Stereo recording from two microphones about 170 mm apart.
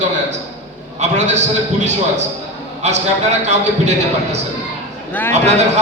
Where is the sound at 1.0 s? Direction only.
45° right (ahead or behind).